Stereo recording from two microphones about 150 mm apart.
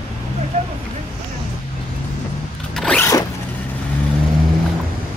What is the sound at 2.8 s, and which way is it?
Zipper, 5° left (ahead or behind).